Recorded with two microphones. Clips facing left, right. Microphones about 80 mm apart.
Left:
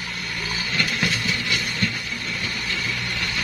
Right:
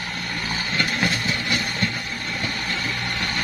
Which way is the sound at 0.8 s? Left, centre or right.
Right.